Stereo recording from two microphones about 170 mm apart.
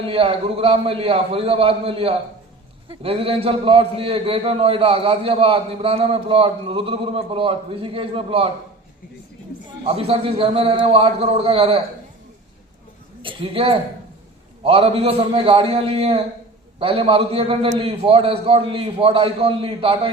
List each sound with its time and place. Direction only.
0.0 s a man's voice: 35° right (ahead or behind)
9.8 s a man's voice: 35° right (ahead or behind)
13.2 s a man's voice: 35° right (ahead or behind)